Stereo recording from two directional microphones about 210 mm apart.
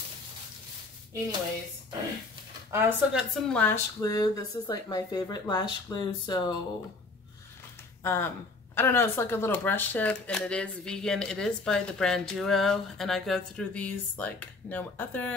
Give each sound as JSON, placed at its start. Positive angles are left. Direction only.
{"t": 2.7, "sound": "speech", "side_deg": -5}
{"t": 8.0, "sound": "speech", "side_deg": 10}